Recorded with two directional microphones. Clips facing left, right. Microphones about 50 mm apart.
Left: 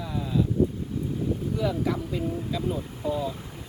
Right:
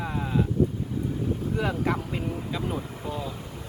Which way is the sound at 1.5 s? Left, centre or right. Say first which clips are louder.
Right 1 dB; right.